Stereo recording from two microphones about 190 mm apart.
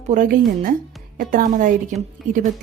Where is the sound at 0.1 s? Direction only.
45° right (ahead or behind).